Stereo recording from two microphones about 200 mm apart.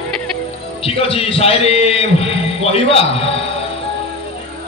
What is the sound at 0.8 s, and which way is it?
A man's voice, 30° left (ahead or behind).